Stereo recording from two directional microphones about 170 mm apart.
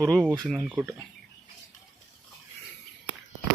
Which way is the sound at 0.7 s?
10° right (ahead or behind).